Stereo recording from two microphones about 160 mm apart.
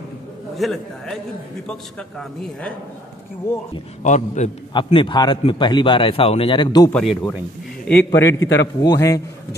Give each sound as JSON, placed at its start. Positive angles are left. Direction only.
{"t": 0.6, "sound": "speech", "side_deg": 0}
{"t": 4.0, "sound": "a man's voice", "side_deg": 50}
{"t": 4.8, "sound": "a man's voice", "side_deg": 30}
{"t": 6.9, "sound": "a man's voice", "side_deg": 5}